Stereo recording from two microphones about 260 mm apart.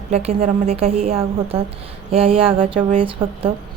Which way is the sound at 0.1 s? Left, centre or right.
Right.